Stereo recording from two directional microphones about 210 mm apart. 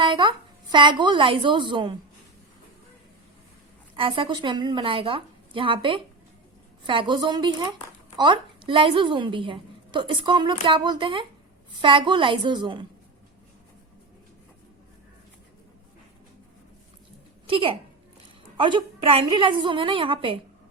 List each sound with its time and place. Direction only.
0.0 s speech: 20° right (ahead or behind)
3.9 s a woman's voice: 25° right (ahead or behind)
17.4 s a woman's voice: 25° right (ahead or behind)